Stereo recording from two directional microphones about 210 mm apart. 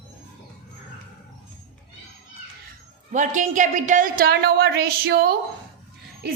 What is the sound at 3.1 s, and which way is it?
A woman's voice, 35° right (ahead or behind).